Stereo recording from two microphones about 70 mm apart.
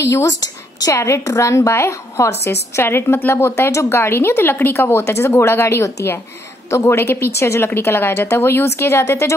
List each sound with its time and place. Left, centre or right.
0.0 s a woman's voice: left